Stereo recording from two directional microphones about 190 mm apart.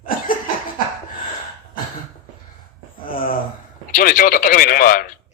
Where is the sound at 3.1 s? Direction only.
50° left (ahead or behind).